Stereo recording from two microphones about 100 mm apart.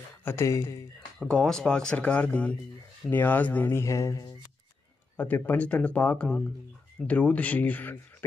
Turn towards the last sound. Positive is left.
turn(degrees=20)  # may be behind; listen again after turning